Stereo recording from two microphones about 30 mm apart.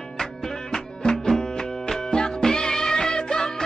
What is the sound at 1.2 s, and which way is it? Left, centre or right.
Music, centre.